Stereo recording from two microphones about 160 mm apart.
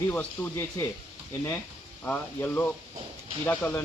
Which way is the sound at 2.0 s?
10° left (ahead or behind).